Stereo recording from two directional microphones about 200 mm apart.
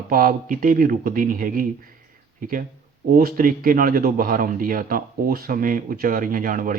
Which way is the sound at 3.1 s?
45° right (ahead or behind).